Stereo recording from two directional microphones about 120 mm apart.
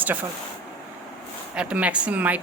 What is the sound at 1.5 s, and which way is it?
Speech, 10° right (ahead or behind).